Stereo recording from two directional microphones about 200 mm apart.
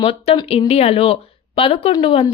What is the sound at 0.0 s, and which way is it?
Speech, 30° left (ahead or behind).